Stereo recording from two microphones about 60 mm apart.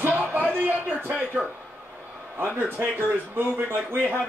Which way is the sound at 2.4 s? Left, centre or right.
Right.